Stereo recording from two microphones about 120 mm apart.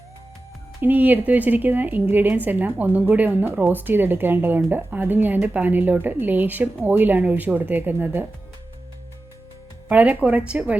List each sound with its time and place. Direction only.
0.8 s speech: 15° right (ahead or behind)
9.9 s speech: 10° right (ahead or behind)